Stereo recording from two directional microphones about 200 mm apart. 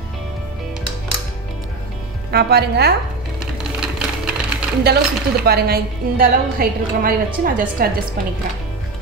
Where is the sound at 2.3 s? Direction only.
55° right (ahead or behind).